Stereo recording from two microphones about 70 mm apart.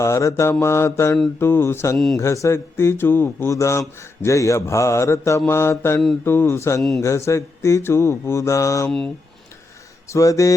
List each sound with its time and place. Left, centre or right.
0.0 s mantra: left
1.4 s speech: left
3.5 s mantra: left
6.2 s speech: left
7.0 s mantra: left
10.1 s mantra: left